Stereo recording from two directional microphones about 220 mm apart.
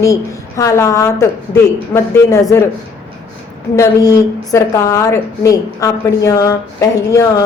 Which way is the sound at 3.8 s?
15° left (ahead or behind).